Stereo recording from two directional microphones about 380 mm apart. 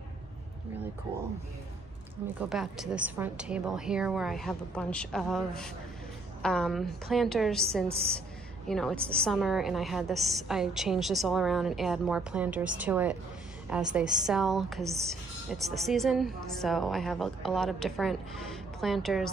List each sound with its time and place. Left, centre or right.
2.2 s a woman's voice: centre